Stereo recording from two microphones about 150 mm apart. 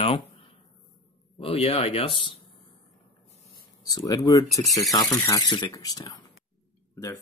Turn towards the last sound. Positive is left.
turn(degrees=20)  # may be behind; listen again after turning